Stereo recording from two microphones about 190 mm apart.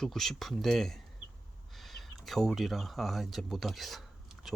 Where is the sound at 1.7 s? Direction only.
Centre (ahead or behind).